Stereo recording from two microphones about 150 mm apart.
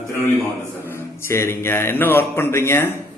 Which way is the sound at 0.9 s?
15° left (ahead or behind).